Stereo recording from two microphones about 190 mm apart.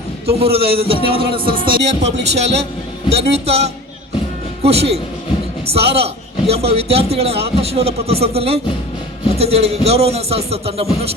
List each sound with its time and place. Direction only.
0.3 s a man's voice: 30° right (ahead or behind)
1.0 s music: 30° right (ahead or behind)
1.5 s a man's voice: 25° right (ahead or behind)